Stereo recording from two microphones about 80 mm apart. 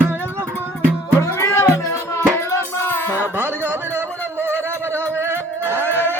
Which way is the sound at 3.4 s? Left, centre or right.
Right.